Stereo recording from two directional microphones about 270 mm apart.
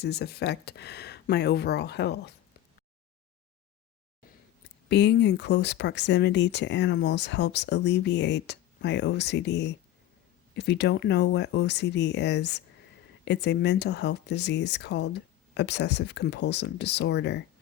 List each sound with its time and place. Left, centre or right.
0.0 s speech: left
4.9 s speech: left